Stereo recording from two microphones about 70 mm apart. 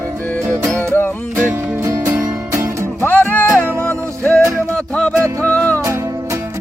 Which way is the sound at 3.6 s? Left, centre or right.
Right.